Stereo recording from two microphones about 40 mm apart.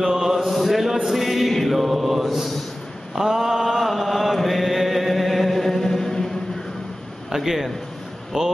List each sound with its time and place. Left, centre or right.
0.0 s chant: centre
1.0 s a sound: centre
3.2 s chant: centre
7.2 s a man's voice: centre
8.3 s speech: centre